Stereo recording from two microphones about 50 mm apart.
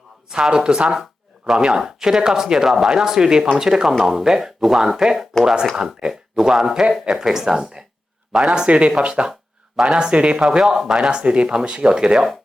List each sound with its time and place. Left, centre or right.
0.3 s speech: centre
8.4 s speech: right
10.4 s speech: centre